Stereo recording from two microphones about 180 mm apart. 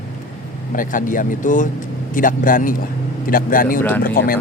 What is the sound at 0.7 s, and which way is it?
Speech, 45° left (ahead or behind).